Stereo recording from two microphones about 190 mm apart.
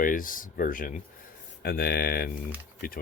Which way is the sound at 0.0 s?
45° left (ahead or behind).